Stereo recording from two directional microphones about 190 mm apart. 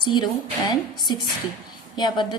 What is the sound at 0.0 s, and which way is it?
Speech, 25° left (ahead or behind).